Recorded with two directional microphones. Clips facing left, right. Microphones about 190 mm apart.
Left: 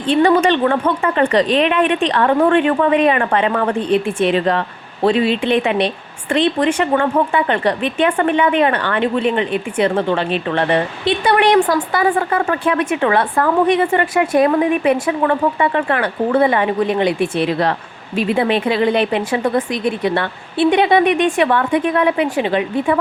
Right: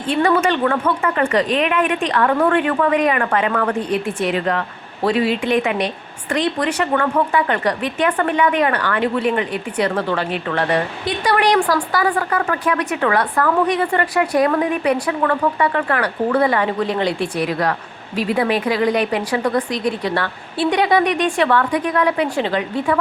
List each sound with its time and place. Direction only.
0.1 s speech: 30° left (ahead or behind)